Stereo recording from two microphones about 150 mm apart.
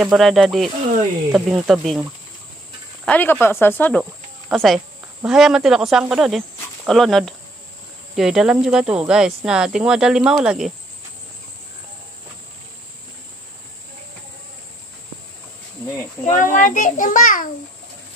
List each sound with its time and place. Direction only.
0.0 s speech: centre (ahead or behind)
3.1 s speech: 15° left (ahead or behind)
4.0 s speech: centre (ahead or behind)
16.3 s a child's voice: 60° left (ahead or behind)